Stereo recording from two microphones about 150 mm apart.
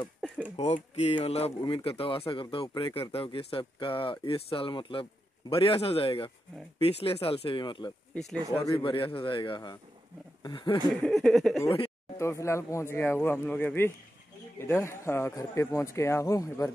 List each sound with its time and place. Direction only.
0.6 s speech: 45° left (ahead or behind); by 7.9 s 30° left (ahead or behind)
8.1 s speech: centre (ahead or behind)
8.5 s speech: 20° left (ahead or behind)
8.7 s speech: 35° left (ahead or behind)
10.9 s speech: 5° left (ahead or behind)
12.2 s speech: 20° left (ahead or behind)